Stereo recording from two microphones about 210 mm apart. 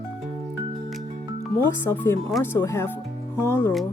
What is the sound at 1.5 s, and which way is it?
Speech, 10° left (ahead or behind).